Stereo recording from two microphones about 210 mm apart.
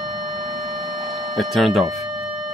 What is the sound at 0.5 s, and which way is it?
Tick-tock, 40° right (ahead or behind).